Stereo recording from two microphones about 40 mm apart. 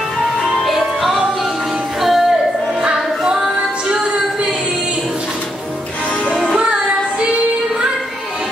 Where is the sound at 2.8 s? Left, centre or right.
Centre.